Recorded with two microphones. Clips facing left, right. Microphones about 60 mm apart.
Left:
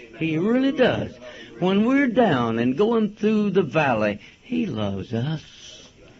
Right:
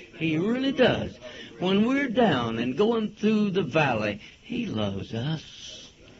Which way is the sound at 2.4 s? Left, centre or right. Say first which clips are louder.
Left 6 dB; left.